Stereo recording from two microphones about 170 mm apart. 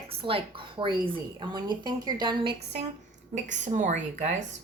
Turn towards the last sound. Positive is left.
turn(degrees=-45)  # may be behind; listen again after turning